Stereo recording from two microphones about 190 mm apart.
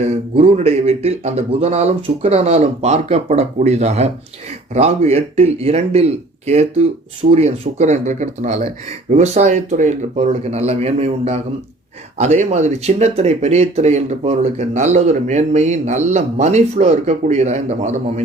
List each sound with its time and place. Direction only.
0.0 s speech: 35° right (ahead or behind)